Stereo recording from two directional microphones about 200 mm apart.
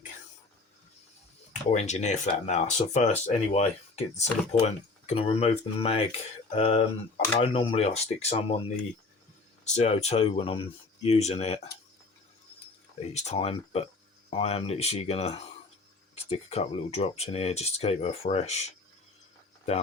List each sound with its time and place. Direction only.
1.7 s speech: 35° left (ahead or behind)
9.6 s speech: 35° left (ahead or behind)
13.1 s speech: 30° left (ahead or behind)